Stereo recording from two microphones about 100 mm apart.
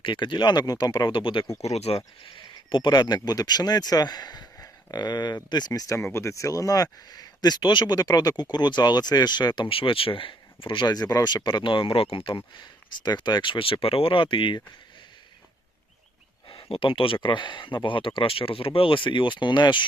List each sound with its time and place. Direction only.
0.0 s speech: 55° left (ahead or behind)
1.6 s speech: 90° left
2.3 s speech: 55° left (ahead or behind)
9.6 s speech: 65° left (ahead or behind)
13.0 s speech: 45° left (ahead or behind)
16.5 s speech: 65° left (ahead or behind); by 19.8 s 50° left (ahead or behind)